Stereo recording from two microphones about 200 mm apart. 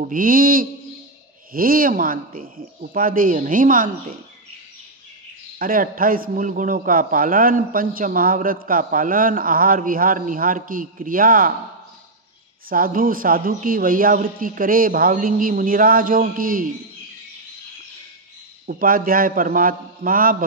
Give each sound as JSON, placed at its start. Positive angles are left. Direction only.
{"t": 0.0, "sound": "a man's voice", "side_deg": -45}
{"t": 5.6, "sound": "a man's voice", "side_deg": -45}
{"t": 12.6, "sound": "a man's voice", "side_deg": -45}
{"t": 18.7, "sound": "a man's voice", "side_deg": -45}